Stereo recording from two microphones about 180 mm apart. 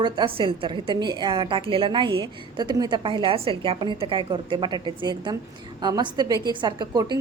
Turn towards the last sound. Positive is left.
turn(degrees=-25)  # may be behind; listen again after turning